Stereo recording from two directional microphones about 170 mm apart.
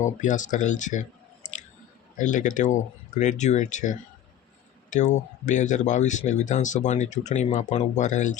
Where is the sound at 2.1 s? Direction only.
50° left (ahead or behind).